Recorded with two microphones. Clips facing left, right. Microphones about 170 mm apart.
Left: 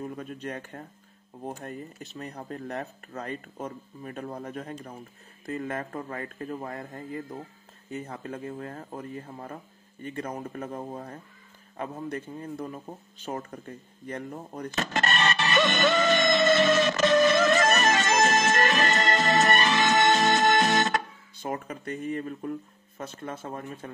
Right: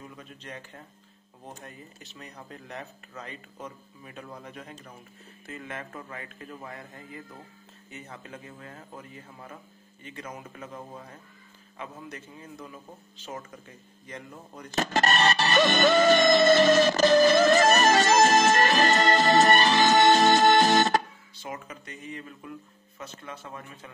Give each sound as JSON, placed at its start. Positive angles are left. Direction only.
{"t": 0.0, "sound": "speech", "side_deg": 50}
{"t": 8.1, "sound": "speech", "side_deg": 40}
{"t": 14.7, "sound": "music", "side_deg": -35}
{"t": 21.4, "sound": "speech", "side_deg": 50}